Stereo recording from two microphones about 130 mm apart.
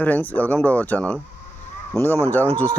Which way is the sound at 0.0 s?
10° left (ahead or behind).